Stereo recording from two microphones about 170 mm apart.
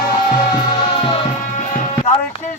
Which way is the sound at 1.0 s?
30° left (ahead or behind).